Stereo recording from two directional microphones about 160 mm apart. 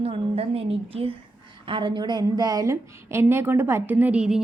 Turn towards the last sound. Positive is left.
turn(degrees=-5)  # may be behind; listen again after turning